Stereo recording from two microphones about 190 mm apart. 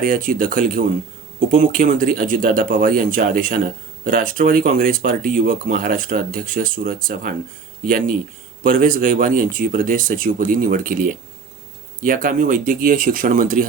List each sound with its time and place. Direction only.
0.0 s speech: 45° right (ahead or behind)